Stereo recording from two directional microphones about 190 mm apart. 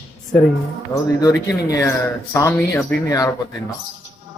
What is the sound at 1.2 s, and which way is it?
Speech, 20° left (ahead or behind).